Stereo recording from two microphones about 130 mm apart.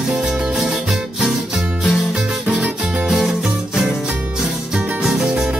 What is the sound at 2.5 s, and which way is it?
Music, 5° right (ahead or behind).